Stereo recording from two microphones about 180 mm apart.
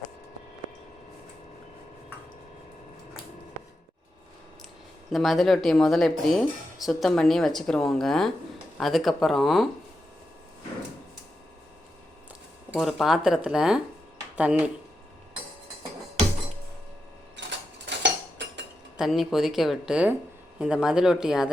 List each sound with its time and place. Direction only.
5.1 s speech: centre (ahead or behind)
12.7 s speech: centre (ahead or behind)
17.4 s a sound: 80° right
17.8 s cutlery: 75° right (ahead or behind)
18.9 s speech: centre (ahead or behind)